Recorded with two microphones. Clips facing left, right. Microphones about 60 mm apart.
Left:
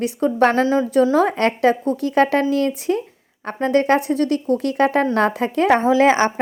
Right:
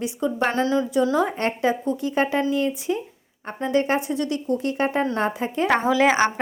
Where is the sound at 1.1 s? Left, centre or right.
Left.